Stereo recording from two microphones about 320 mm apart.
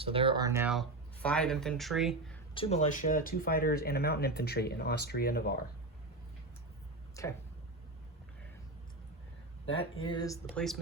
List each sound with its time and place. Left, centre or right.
0.0 s speech: centre
2.6 s speech: left
7.2 s a sound: centre
10.0 s speech: centre